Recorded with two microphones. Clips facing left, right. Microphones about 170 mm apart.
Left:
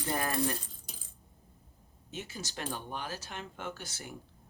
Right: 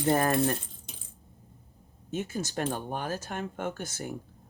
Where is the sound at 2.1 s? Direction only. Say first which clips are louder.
Right 10 dB; 50° right (ahead or behind).